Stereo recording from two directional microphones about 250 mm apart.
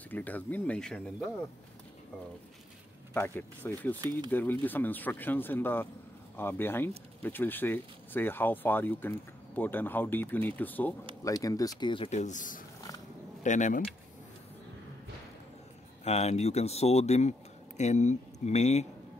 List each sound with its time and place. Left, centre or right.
0.1 s speech: centre
3.2 s speech: centre
4.0 s speech: centre
4.3 s speech: centre; by 13.8 s left
16.0 s speech: left